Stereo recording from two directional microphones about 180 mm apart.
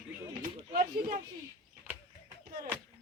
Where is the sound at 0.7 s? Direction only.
50° right (ahead or behind).